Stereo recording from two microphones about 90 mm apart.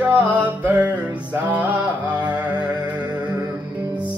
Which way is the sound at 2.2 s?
15° right (ahead or behind).